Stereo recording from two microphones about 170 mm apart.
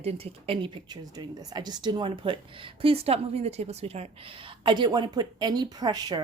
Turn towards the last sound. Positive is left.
turn(degrees=-25)  # may be behind; listen again after turning